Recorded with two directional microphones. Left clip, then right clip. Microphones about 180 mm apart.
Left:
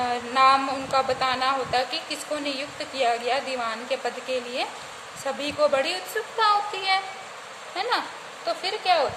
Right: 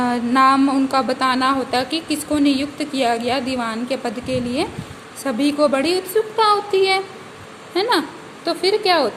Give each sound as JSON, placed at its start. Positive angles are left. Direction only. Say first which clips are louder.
{"t": 0.0, "sound": "a woman's voice", "louder": "right 5 dB", "side_deg": -35}